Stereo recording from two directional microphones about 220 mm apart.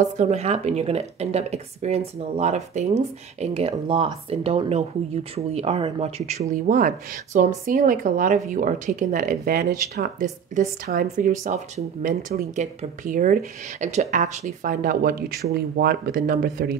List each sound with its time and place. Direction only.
0.0 s speech: 30° right (ahead or behind)